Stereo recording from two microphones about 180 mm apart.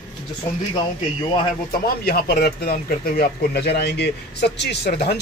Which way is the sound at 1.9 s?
60° left (ahead or behind).